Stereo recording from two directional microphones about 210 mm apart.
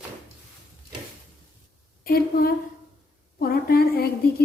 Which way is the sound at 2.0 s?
45° left (ahead or behind).